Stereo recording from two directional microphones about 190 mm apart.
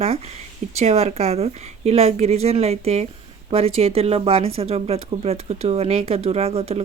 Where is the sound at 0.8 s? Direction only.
35° right (ahead or behind).